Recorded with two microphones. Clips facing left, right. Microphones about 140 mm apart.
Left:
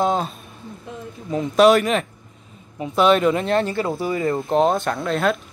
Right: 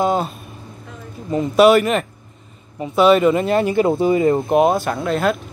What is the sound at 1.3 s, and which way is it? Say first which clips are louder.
Speech: right 2 dB; centre (ahead or behind).